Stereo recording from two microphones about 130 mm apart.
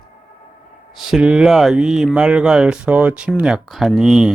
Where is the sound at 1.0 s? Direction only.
5° right (ahead or behind).